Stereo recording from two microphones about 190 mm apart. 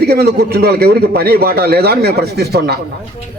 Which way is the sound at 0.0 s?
60° right (ahead or behind).